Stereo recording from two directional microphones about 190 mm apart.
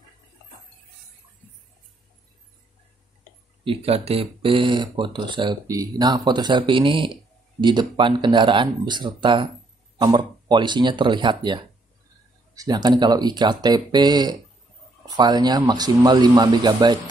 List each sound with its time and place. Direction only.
3.6 s speech: 30° right (ahead or behind)